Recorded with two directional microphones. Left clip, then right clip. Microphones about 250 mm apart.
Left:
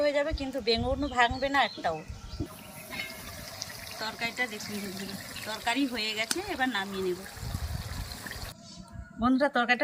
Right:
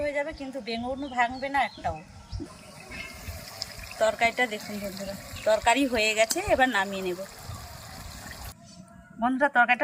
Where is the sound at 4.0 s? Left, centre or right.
Right.